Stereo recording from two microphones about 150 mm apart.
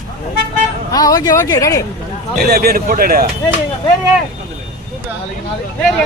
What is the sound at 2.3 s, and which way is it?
Speech, 90° right.